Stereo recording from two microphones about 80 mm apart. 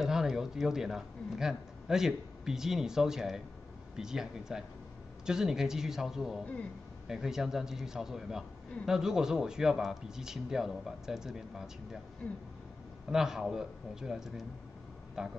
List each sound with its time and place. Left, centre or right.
0.0 s a man's voice: centre
13.1 s a man's voice: centre